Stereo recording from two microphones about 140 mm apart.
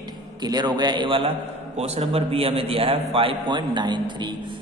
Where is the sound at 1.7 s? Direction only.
50° right (ahead or behind); by 4.3 s 30° right (ahead or behind).